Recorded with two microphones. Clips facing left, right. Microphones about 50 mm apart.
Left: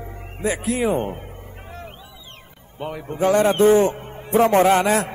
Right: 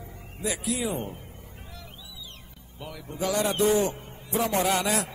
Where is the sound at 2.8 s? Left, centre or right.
Left.